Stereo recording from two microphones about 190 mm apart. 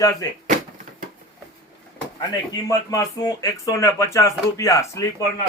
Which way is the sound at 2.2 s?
20° left (ahead or behind).